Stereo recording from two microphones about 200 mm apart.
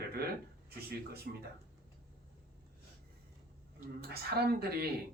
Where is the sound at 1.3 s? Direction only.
55° right (ahead or behind).